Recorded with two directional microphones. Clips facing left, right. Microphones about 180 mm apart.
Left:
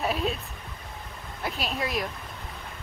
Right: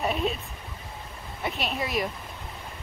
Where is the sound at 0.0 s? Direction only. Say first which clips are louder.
Right 1 dB; centre (ahead or behind).